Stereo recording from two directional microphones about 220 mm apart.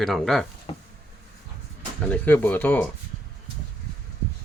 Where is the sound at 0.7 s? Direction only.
25° left (ahead or behind).